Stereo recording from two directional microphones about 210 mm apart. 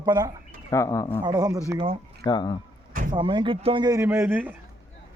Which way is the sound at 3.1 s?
20° right (ahead or behind).